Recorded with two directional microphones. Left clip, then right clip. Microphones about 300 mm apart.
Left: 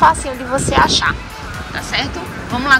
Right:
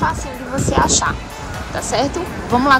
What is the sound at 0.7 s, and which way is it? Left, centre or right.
Speech, centre.